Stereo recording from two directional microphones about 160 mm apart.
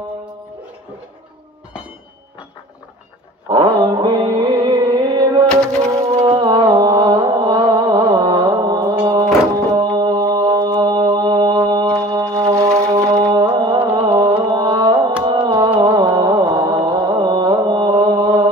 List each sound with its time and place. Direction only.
3.4 s music: 25° right (ahead or behind)
6.2 s mantra: 30° right (ahead or behind)
12.0 s music: 20° right (ahead or behind)